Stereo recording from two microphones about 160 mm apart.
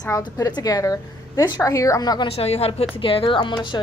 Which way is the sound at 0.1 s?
20° left (ahead or behind).